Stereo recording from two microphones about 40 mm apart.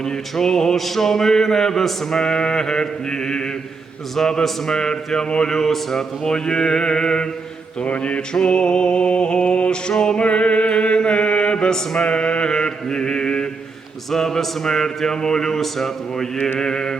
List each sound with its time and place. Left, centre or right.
0.0 s music: centre
7.9 s music: left
14.1 s music: centre